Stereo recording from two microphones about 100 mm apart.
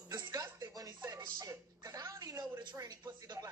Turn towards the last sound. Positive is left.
turn(degrees=-45)  # may be behind; listen again after turning